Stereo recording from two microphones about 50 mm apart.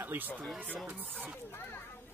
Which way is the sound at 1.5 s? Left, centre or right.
Left.